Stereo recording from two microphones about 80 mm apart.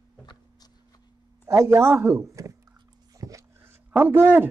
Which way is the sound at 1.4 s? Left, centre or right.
Right.